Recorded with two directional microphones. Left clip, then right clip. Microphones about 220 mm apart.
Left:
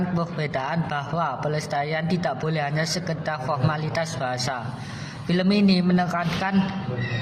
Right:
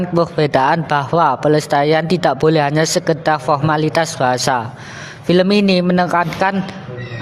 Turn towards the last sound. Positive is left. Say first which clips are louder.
# right 10 dB
turn(degrees=-45)  # may be behind; listen again after turning